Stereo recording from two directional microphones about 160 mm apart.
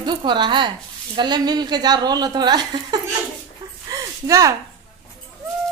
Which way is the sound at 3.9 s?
20° right (ahead or behind).